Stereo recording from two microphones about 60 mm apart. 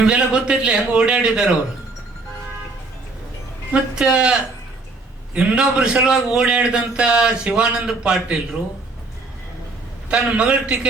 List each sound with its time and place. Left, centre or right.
0.0 s a man's voice: centre
3.7 s a man's voice: centre
10.1 s a man's voice: centre